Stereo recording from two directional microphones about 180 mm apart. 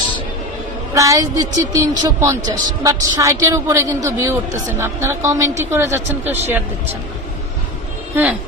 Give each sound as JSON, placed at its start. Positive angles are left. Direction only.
{"t": 0.9, "sound": "a man's voice", "side_deg": -15}
{"t": 8.1, "sound": "speech", "side_deg": -10}